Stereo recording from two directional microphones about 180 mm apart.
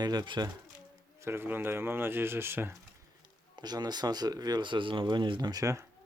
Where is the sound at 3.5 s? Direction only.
25° right (ahead or behind).